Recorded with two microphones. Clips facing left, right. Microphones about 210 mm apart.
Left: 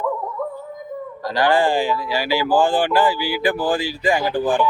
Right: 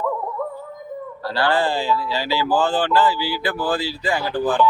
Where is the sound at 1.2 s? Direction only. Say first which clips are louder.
Left 3 dB; 15° left (ahead or behind).